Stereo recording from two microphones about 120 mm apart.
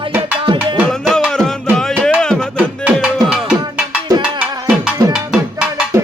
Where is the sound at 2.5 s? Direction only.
10° right (ahead or behind).